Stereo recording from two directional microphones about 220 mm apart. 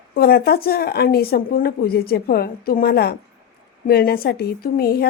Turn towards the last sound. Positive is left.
turn(degrees=45)  # may be behind; listen again after turning